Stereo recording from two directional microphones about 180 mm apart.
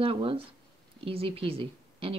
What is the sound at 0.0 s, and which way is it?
Speech, 30° right (ahead or behind).